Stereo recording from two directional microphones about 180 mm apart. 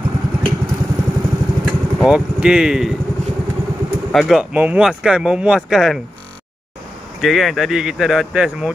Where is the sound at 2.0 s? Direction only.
5° right (ahead or behind).